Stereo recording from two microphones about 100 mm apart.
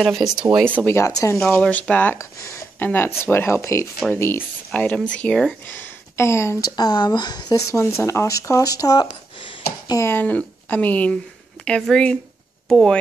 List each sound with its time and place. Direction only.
0.0 s speech: centre (ahead or behind)
0.8 s speech: 30° left (ahead or behind)
1.6 s a woman's voice: 15° left (ahead or behind)
2.1 s speech: 30° left (ahead or behind)
4.6 s a woman's voice: 10° left (ahead or behind)
5.8 s speech: 25° left (ahead or behind)
6.8 s speech: 45° left (ahead or behind)
7.5 s speech: 25° left (ahead or behind)
10.0 s a woman's voice: 20° left (ahead or behind)